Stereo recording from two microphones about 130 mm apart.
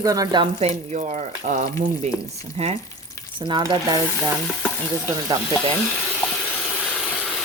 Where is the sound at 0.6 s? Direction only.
55° right (ahead or behind).